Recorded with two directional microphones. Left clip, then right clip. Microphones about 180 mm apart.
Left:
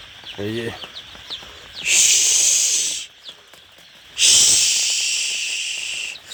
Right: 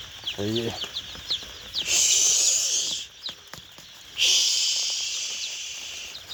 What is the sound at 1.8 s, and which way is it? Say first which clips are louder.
Snake: left 6 dB; 10° left (ahead or behind).